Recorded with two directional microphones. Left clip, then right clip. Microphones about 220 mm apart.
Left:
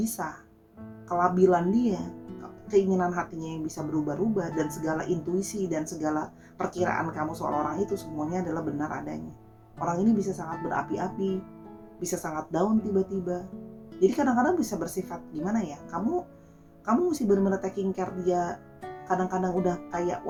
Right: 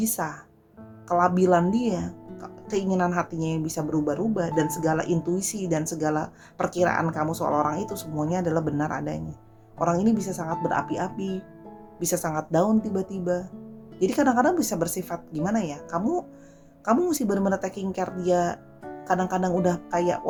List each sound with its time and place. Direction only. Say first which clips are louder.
0.0 s speech: right 4 dB; 45° right (ahead or behind)